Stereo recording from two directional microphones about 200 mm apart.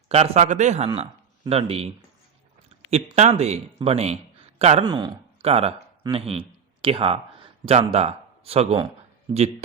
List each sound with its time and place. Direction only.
0.1 s a man's voice: 35° right (ahead or behind)
2.9 s a man's voice: 35° right (ahead or behind)